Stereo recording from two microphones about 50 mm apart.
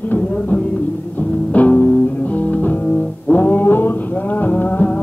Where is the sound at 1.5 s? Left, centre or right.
Left.